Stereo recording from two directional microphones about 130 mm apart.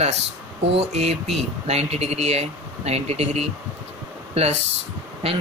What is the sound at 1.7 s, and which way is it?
Speech, 55° right (ahead or behind).